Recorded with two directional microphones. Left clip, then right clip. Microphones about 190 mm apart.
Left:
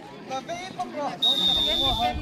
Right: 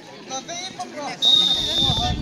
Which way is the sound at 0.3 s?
Centre (ahead or behind).